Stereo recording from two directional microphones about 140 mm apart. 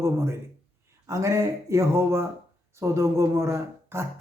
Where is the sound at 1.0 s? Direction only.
20° right (ahead or behind).